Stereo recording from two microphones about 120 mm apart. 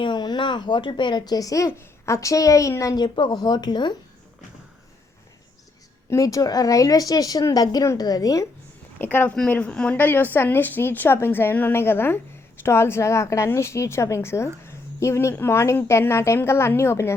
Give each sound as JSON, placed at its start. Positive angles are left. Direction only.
{"t": 0.0, "sound": "a woman's voice", "side_deg": 40}
{"t": 6.1, "sound": "a woman's voice", "side_deg": 30}
{"t": 9.0, "sound": "a woman's voice", "side_deg": 15}